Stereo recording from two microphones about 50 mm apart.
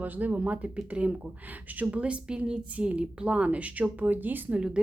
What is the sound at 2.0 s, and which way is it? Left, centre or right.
A woman's voice, right.